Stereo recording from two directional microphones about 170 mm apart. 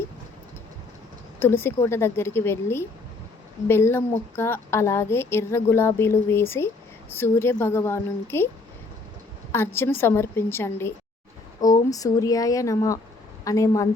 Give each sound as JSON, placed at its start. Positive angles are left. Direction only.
{"t": 1.4, "sound": "a woman's voice", "side_deg": 10}
{"t": 9.5, "sound": "a woman's voice", "side_deg": 15}